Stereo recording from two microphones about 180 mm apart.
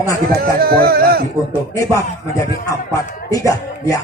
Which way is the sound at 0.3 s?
55° right (ahead or behind).